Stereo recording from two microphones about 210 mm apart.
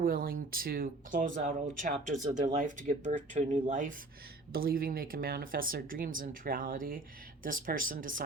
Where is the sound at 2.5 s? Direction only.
35° right (ahead or behind).